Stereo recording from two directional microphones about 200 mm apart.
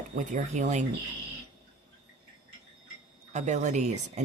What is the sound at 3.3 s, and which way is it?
Speech, 35° right (ahead or behind).